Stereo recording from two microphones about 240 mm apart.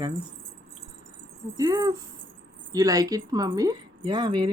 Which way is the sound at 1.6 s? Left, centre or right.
Centre.